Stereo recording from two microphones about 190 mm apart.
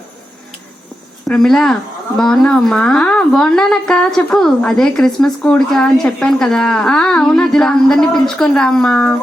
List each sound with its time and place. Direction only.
1.3 s a woman's voice: 5° left (ahead or behind)